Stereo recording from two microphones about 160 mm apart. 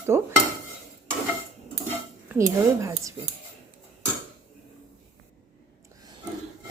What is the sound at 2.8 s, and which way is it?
Speech, 20° right (ahead or behind).